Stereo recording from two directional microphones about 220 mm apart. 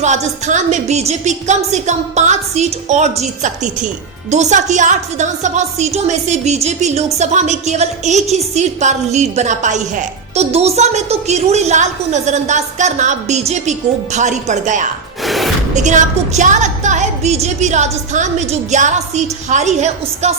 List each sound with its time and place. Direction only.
0.0 s a woman's voice: 30° right (ahead or behind)
15.2 s music: centre (ahead or behind)
15.7 s a woman's voice: 35° right (ahead or behind)